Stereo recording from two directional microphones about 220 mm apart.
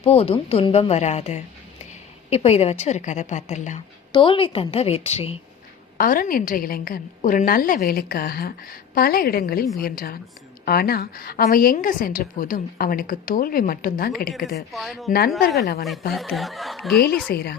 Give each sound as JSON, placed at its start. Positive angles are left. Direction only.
{"t": 0.0, "sound": "a woman's voice", "side_deg": 25}
{"t": 4.1, "sound": "speech", "side_deg": 25}
{"t": 6.0, "sound": "a woman's voice", "side_deg": 40}
{"t": 14.7, "sound": "speech", "side_deg": 0}
{"t": 15.5, "sound": "speech", "side_deg": 45}
{"t": 16.1, "sound": "speech", "side_deg": 0}
{"t": 17.2, "sound": "speech", "side_deg": 45}